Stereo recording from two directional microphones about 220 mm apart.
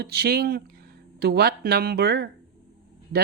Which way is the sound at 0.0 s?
45° right (ahead or behind).